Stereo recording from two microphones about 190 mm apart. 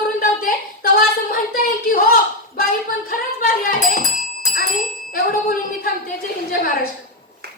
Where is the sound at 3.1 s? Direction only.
50° left (ahead or behind).